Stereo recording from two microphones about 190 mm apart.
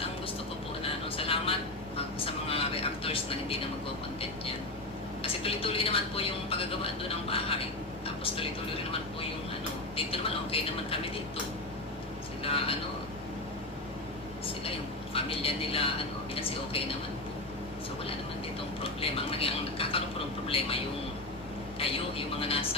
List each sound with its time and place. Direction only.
0.8 s vehicle: 30° left (ahead or behind)
5.2 s speech: 30° left (ahead or behind)
8.0 s a sound: 30° left (ahead or behind)
9.9 s speech: 30° left (ahead or behind)
12.4 s a sound: 30° left (ahead or behind)
15.1 s a woman's voice: 30° left (ahead or behind)
18.8 s speech: 30° left (ahead or behind)
22.4 s speech: 30° left (ahead or behind)